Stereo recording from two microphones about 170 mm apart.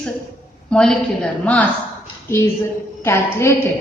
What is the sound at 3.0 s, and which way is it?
Speech, 15° left (ahead or behind).